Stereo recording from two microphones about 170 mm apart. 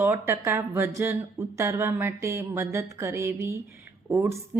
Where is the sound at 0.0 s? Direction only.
15° right (ahead or behind).